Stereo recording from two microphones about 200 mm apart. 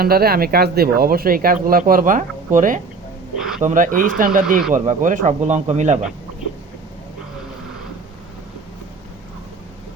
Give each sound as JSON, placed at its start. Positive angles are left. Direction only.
{"t": 0.0, "sound": "speech", "side_deg": -50}